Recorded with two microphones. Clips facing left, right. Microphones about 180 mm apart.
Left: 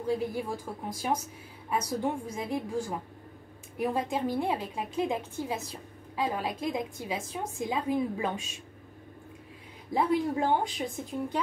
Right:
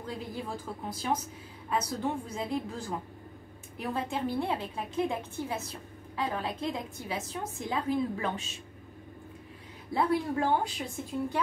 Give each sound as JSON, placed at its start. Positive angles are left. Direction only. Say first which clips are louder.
{"t": 0.0, "sound": "a woman's voice", "louder": "left 7 dB", "side_deg": 15}
{"t": 9.9, "sound": "a woman's voice", "louder": "left 1 dB", "side_deg": 15}